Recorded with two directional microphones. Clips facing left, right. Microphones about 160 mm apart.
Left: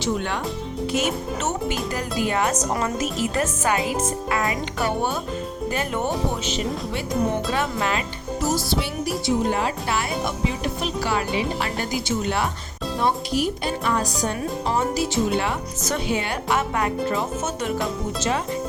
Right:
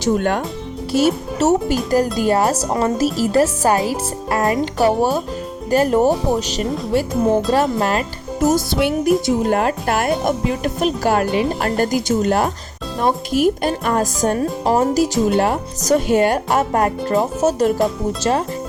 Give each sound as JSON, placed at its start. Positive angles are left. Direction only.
{"t": 0.0, "sound": "speech", "side_deg": -50}
{"t": 0.9, "sound": "speech", "side_deg": -35}